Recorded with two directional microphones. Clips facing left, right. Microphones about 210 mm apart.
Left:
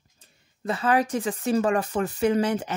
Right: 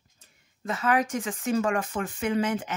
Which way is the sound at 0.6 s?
35° left (ahead or behind).